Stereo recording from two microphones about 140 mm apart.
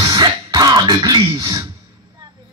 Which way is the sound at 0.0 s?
30° right (ahead or behind).